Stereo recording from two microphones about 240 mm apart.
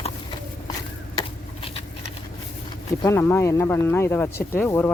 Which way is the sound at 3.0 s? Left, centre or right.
Centre.